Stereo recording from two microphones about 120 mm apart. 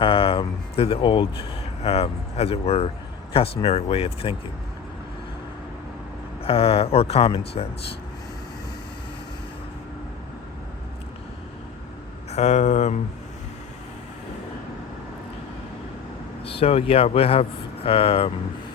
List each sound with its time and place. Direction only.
0.0 s speech: 50° left (ahead or behind)
6.4 s speech: 55° left (ahead or behind)
12.3 s speech: 70° left (ahead or behind)
16.4 s speech: 50° left (ahead or behind)